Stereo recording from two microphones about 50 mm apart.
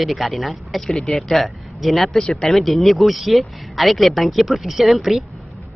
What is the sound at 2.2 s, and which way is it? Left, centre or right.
Speech, centre.